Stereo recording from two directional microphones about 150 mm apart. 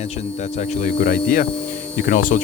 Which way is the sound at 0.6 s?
55° left (ahead or behind).